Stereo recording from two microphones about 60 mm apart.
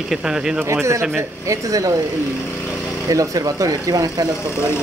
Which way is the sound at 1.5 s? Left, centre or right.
Right.